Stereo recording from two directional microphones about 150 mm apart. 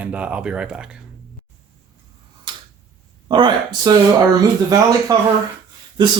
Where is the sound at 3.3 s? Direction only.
30° right (ahead or behind).